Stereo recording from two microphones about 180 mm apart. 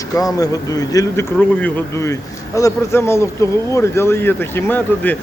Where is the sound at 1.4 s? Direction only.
10° left (ahead or behind).